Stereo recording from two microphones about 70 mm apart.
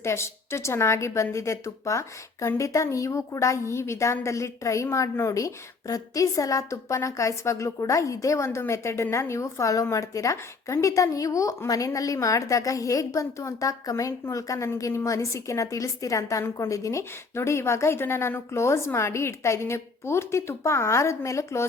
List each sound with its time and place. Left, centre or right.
0.0 s a woman's voice: left